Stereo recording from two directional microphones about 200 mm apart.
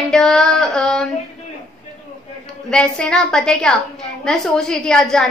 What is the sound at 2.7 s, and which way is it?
A woman's voice, 5° left (ahead or behind).